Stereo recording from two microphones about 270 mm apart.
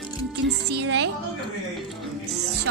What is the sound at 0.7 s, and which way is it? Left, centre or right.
Music, right.